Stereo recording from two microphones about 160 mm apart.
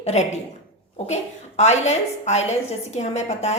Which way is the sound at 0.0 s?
40° left (ahead or behind).